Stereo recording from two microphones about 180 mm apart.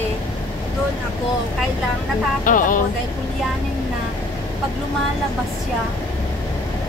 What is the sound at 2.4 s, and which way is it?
Speech, 50° left (ahead or behind).